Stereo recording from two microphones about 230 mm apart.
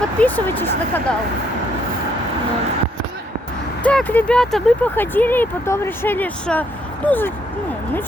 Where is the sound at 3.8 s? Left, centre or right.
Centre.